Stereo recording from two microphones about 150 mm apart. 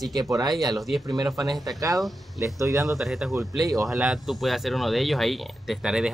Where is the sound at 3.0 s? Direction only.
Centre (ahead or behind).